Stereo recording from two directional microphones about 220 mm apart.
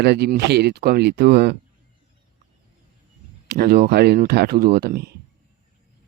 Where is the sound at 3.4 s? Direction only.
45° right (ahead or behind).